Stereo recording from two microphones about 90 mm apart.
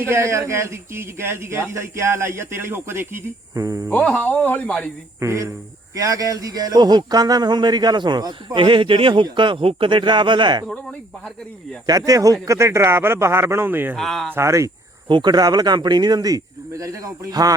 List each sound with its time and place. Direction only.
0.1 s speech: 30° right (ahead or behind)
3.5 s speech: 40° right (ahead or behind)
3.8 s speech: 15° left (ahead or behind)
5.2 s speech: 35° right (ahead or behind); by 8.5 s 50° right (ahead or behind)
8.5 s speech: 70° right (ahead or behind)
9.2 s speech: 60° right (ahead or behind)
11.9 s speech: 40° right (ahead or behind); by 13.9 s 20° right (ahead or behind)
13.9 s speech: 5° left (ahead or behind)
14.3 s speech: 35° right (ahead or behind)
15.0 s speech: 55° right (ahead or behind)